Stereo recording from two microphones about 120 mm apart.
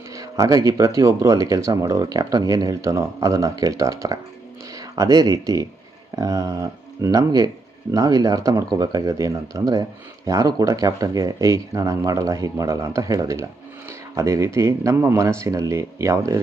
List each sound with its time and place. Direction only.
0.1 s speech: 25° right (ahead or behind)